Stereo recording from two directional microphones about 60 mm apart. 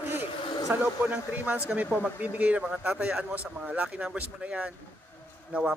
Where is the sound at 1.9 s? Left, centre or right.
Left.